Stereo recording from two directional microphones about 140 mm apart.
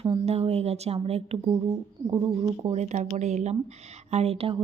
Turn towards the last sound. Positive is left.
turn(degrees=-45)  # may be behind; listen again after turning